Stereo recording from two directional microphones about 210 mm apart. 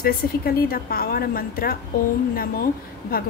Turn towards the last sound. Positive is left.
turn(degrees=45)  # may be behind; listen again after turning